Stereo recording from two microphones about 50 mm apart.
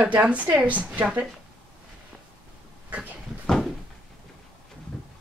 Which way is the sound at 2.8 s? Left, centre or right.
Right.